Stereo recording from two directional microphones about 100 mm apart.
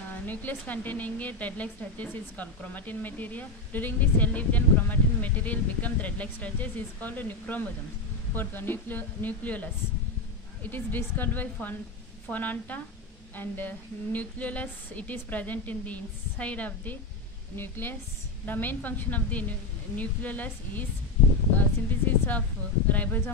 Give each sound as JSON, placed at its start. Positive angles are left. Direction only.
{"t": 0.1, "sound": "speech", "side_deg": 20}
{"t": 10.7, "sound": "speech", "side_deg": 20}